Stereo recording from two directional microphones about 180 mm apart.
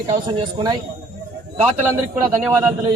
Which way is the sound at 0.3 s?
25° right (ahead or behind).